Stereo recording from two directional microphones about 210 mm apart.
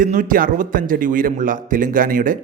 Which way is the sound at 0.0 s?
40° right (ahead or behind).